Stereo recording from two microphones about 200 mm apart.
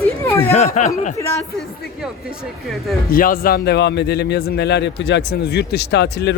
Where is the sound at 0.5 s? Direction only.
35° left (ahead or behind).